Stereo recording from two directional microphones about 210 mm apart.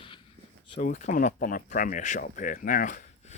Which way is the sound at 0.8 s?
40° left (ahead or behind).